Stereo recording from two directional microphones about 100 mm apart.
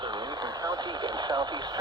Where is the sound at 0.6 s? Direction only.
40° right (ahead or behind).